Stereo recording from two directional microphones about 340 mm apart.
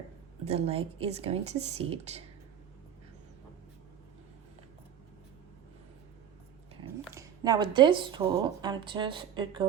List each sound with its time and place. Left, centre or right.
0.4 s speech: centre
7.1 s speech: centre